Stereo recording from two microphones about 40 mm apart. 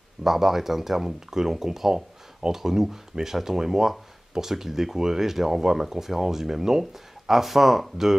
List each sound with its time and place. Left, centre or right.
0.2 s speech: centre